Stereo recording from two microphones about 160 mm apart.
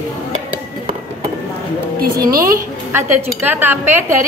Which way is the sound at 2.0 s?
70° right (ahead or behind).